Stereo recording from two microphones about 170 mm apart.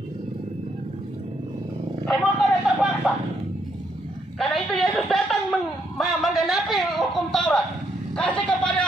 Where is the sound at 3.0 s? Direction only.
5° right (ahead or behind).